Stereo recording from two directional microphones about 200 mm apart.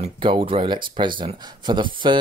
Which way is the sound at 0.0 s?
25° right (ahead or behind).